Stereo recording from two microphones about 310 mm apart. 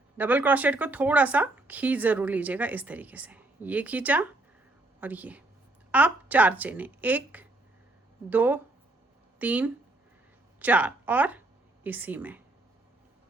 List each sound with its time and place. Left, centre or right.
0.2 s a woman's voice: centre